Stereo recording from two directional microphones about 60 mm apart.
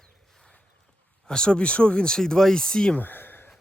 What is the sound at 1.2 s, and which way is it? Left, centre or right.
Speech, centre.